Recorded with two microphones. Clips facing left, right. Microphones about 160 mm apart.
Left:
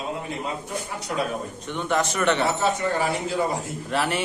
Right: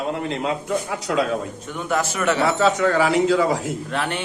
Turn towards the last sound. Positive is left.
turn(degrees=5)  # may be behind; listen again after turning